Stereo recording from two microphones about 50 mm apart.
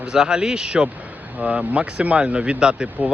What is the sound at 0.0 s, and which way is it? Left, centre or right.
Speech, centre.